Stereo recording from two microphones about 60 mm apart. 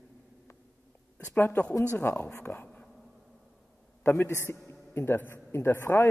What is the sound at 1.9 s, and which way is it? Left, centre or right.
Speech, left.